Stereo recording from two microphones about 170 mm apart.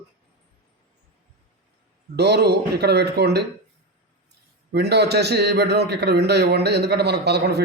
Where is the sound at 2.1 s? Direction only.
80° right.